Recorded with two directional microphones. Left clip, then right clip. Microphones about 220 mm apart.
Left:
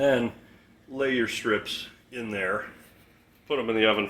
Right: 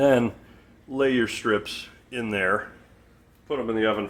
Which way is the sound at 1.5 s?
5° left (ahead or behind).